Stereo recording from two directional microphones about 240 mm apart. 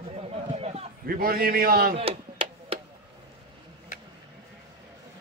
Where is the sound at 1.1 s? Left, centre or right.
Right.